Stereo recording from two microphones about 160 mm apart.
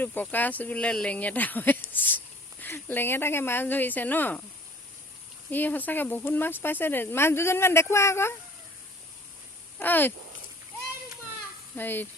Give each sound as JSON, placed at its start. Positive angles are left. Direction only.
{"t": 0.0, "sound": "speech", "side_deg": 10}
{"t": 5.5, "sound": "speech", "side_deg": 10}
{"t": 9.7, "sound": "speech", "side_deg": 10}
{"t": 11.8, "sound": "speech", "side_deg": 10}